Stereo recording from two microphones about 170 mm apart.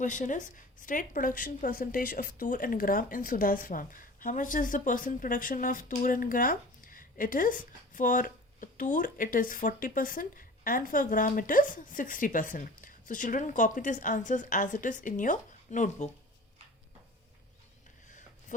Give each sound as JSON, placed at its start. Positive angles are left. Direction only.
{"t": 0.0, "sound": "speech", "side_deg": 50}